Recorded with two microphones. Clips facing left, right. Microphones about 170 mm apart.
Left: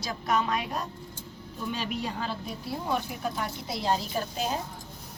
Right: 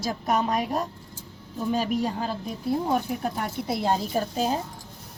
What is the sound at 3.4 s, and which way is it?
A woman's voice, 50° right (ahead or behind).